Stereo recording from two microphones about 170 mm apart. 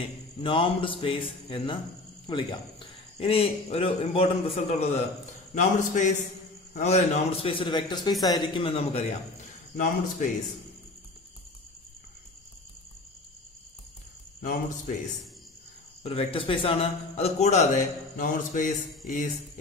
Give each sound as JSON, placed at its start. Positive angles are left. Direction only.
{"t": 0.4, "sound": "a man's voice", "side_deg": 30}
{"t": 5.5, "sound": "mantra", "side_deg": 45}
{"t": 6.7, "sound": "a man's voice", "side_deg": 40}
{"t": 9.8, "sound": "mantra", "side_deg": 50}
{"t": 14.4, "sound": "mantra", "side_deg": 55}
{"t": 16.0, "sound": "a man's voice", "side_deg": 35}
{"t": 18.1, "sound": "mantra", "side_deg": 50}